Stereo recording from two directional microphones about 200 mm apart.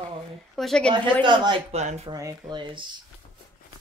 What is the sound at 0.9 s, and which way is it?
A woman's voice, 25° right (ahead or behind).